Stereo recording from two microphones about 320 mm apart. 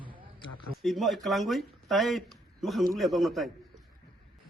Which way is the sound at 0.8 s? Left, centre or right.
Centre.